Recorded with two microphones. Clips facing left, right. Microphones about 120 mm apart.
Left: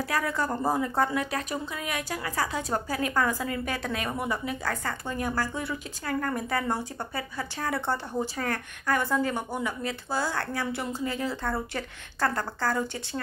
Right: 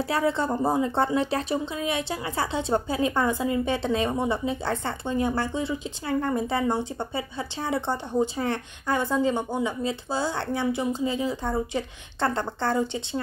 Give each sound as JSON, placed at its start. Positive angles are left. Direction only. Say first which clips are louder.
{"t": 0.0, "sound": "a woman's voice", "louder": "right 4 dB", "side_deg": -25}